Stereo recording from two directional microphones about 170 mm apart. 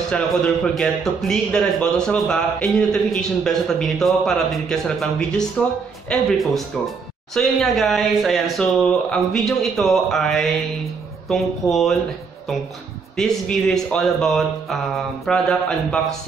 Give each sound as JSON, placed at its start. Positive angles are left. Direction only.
{"t": 0.1, "sound": "a man's voice", "side_deg": 5}
{"t": 13.1, "sound": "a man's voice", "side_deg": 5}